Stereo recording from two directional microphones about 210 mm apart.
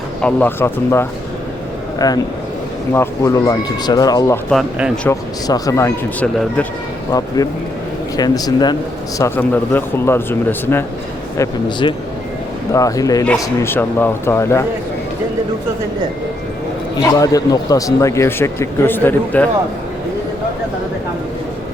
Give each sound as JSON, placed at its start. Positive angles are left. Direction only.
{"t": 0.2, "sound": "a man's voice", "side_deg": 5}
{"t": 4.4, "sound": "speech", "side_deg": 5}
{"t": 5.5, "sound": "a man's voice", "side_deg": 15}
{"t": 11.3, "sound": "a man's voice", "side_deg": 20}
{"t": 17.0, "sound": "a man's voice", "side_deg": 15}